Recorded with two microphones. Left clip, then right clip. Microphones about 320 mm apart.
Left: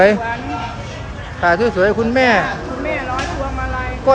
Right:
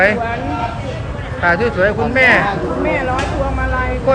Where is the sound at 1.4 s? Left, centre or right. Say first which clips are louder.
Even; centre.